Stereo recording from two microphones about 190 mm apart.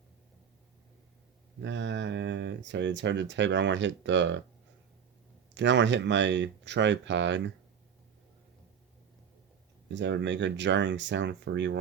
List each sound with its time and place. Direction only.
1.6 s speech: 70° right (ahead or behind)
5.5 s speech: 70° right (ahead or behind)
9.9 s speech: 70° right (ahead or behind)